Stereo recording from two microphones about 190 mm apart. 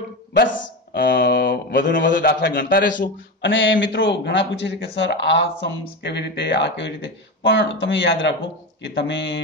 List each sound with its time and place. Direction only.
0.3 s speech: 70° left (ahead or behind)
3.4 s a man's voice: 75° left (ahead or behind)